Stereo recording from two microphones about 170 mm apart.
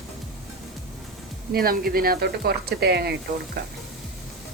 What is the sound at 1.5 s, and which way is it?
Speech, 60° right (ahead or behind).